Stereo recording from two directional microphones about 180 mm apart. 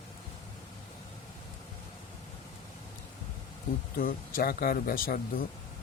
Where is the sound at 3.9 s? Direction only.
50° left (ahead or behind).